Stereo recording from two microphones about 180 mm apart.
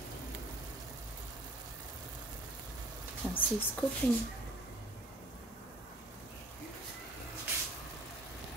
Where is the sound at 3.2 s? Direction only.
5° left (ahead or behind).